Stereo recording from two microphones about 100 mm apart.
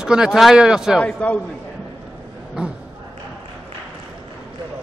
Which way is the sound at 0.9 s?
15° left (ahead or behind).